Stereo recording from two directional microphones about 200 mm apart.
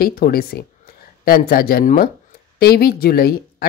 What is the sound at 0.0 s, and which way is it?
Speech, 50° left (ahead or behind).